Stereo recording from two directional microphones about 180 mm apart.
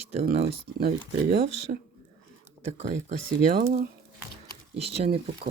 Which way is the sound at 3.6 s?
40° right (ahead or behind).